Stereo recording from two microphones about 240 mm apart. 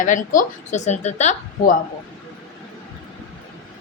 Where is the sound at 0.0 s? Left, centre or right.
Left.